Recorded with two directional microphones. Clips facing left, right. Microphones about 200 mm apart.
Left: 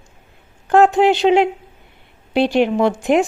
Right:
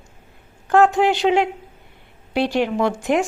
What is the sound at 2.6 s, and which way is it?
Speech, 25° left (ahead or behind).